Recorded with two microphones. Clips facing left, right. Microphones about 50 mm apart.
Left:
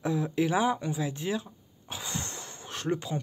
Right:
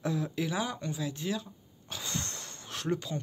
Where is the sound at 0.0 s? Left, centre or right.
Centre.